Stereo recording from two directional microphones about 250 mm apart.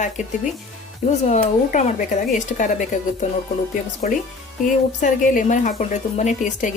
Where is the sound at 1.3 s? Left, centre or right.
Left.